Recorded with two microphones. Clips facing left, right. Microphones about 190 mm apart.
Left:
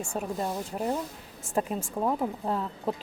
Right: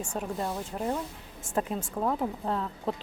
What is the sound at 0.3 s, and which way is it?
Speech, 20° left (ahead or behind).